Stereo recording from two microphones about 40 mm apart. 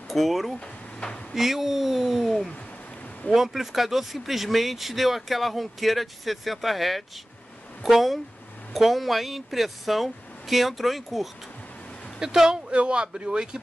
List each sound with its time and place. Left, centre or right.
0.1 s speech: centre
12.2 s speech: centre